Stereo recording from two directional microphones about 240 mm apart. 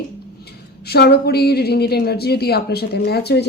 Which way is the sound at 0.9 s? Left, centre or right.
Left.